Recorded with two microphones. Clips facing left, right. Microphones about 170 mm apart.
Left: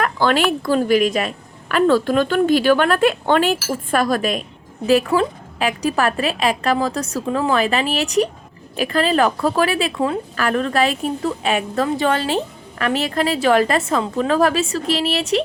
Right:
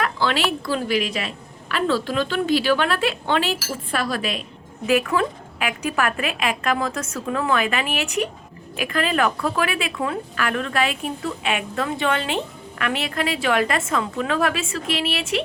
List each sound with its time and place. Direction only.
0.0 s a woman's voice: 50° left (ahead or behind)
4.9 s a woman's voice: 35° left (ahead or behind)